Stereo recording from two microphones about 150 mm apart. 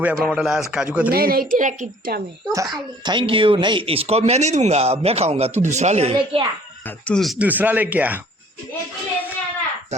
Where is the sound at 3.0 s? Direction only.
30° right (ahead or behind).